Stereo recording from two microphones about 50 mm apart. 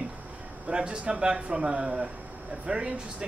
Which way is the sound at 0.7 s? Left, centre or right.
Centre.